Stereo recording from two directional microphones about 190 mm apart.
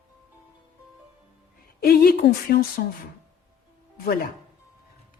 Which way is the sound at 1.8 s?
55° left (ahead or behind).